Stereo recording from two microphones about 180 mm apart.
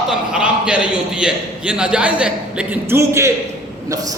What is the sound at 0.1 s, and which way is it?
A man's voice, 5° right (ahead or behind).